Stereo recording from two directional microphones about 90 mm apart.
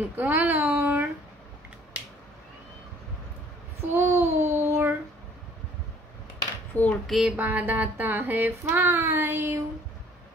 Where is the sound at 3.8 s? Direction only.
25° right (ahead or behind).